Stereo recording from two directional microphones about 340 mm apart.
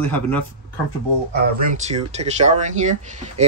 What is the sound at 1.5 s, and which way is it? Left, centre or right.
Speech, right.